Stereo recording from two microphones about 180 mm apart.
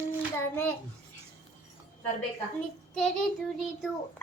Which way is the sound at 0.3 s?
15° left (ahead or behind).